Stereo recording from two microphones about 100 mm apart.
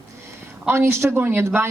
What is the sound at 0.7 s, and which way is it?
A woman's voice, 25° right (ahead or behind).